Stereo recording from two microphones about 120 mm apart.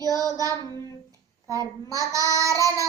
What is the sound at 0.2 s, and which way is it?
Child singing, 30° right (ahead or behind).